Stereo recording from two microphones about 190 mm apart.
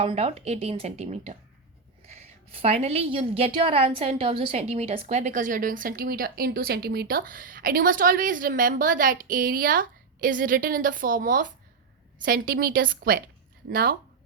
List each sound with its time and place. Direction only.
0.0 s a woman's voice: 30° right (ahead or behind); by 13.9 s 50° right (ahead or behind)